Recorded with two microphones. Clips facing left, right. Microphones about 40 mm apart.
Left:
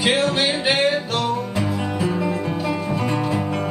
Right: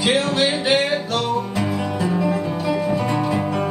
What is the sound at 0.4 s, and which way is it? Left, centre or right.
Music, centre.